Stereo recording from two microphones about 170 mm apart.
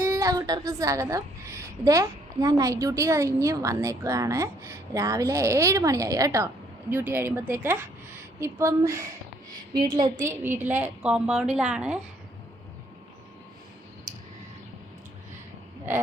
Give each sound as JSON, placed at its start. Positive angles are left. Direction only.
{"t": 0.0, "sound": "a woman's voice", "side_deg": -15}